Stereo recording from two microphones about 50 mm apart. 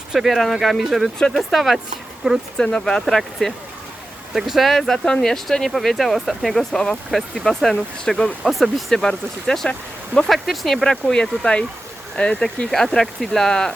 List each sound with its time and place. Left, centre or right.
0.1 s speech: centre
2.6 s speech: centre
4.4 s speech: centre
8.9 s speech: centre
10.2 s speech: centre
10.8 s speech: centre
12.7 s speech: centre